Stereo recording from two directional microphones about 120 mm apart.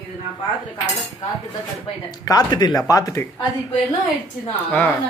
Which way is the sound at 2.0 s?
35° left (ahead or behind).